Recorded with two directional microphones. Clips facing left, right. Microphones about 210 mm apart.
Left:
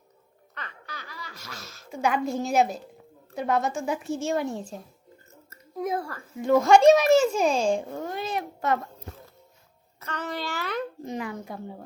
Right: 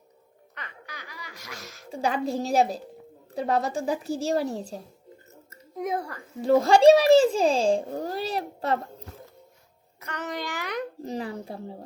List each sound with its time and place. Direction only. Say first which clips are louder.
0.5 s baby laughter: left 1 dB; 15° right (ahead or behind)
1.9 s a child's voice: left 1 dB; 35° right (ahead or behind)
5.5 s a sound: even; 20° right (ahead or behind)
6.4 s a child's voice: even; 35° right (ahead or behind)
10.0 s a child's voice: even; 15° right (ahead or behind)
11.0 s a child's voice: right 1 dB; 35° right (ahead or behind)